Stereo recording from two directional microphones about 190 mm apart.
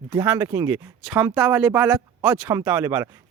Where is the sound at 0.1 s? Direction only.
15° right (ahead or behind).